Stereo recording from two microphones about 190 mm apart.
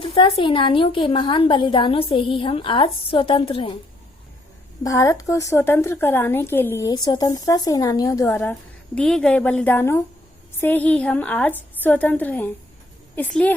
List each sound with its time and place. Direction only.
0.1 s a woman's voice: 30° left (ahead or behind)
4.8 s a woman's voice: 20° left (ahead or behind)